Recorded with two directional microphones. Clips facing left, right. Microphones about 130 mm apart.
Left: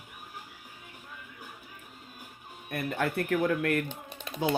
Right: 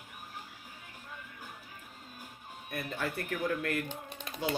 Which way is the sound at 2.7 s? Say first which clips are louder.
Left 6 dB; 55° left (ahead or behind).